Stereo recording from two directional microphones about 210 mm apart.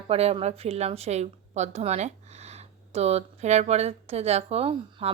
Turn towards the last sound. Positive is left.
turn(degrees=-30)  # may be behind; listen again after turning